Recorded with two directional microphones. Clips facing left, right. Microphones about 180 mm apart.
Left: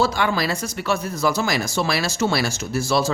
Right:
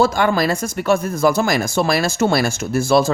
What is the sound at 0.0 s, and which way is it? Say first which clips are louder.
Speech: right 5 dB; 50° right (ahead or behind).